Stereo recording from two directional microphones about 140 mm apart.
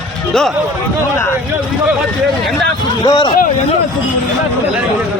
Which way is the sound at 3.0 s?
30° left (ahead or behind).